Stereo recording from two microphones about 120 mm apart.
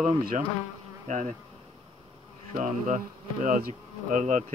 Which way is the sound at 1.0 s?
90° right.